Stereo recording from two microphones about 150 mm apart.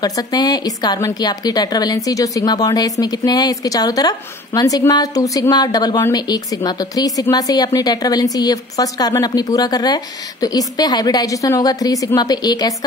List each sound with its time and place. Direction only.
0.0 s speech: 25° left (ahead or behind)